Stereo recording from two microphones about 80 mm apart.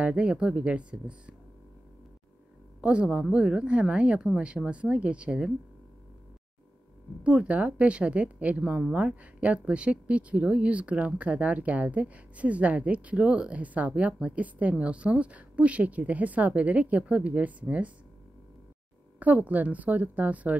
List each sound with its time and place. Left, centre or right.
0.0 s speech: centre
2.8 s speech: centre
7.2 s speech: centre
19.1 s a woman's voice: centre